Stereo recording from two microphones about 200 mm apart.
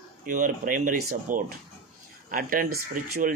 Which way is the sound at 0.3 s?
40° right (ahead or behind).